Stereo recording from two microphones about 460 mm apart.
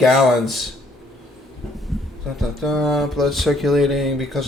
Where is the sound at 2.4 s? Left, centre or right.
Centre.